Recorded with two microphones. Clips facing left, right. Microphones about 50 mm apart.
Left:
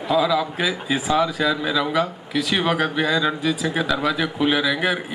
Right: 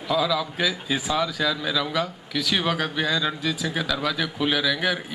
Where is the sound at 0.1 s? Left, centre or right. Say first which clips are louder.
Left 4 dB; centre.